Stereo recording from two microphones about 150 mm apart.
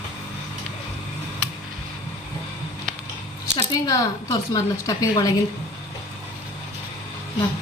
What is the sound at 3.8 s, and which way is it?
A woman's voice, 25° left (ahead or behind).